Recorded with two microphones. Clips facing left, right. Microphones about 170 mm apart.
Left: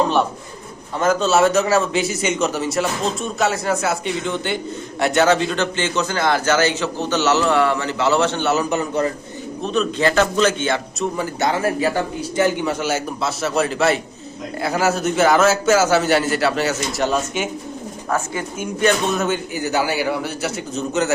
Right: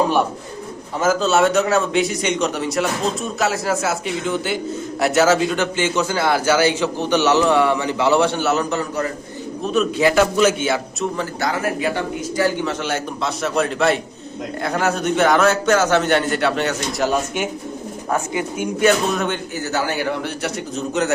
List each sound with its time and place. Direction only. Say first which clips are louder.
0.9 s a man's voice: even; 5° right (ahead or behind)
8.7 s a man's voice: left 2 dB; 20° left (ahead or behind)
9.6 s a man's voice: right 2 dB; 10° right (ahead or behind)
11.3 s a man's voice: left 4 dB; 25° left (ahead or behind)
12.8 s a man's voice: left 1 dB; 5° left (ahead or behind)
18.3 s a man's voice: right 3 dB; 10° right (ahead or behind)
19.1 s a man's voice: left 1 dB; 5° left (ahead or behind)